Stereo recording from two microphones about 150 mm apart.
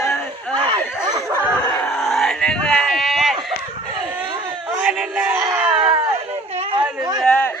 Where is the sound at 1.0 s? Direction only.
25° right (ahead or behind).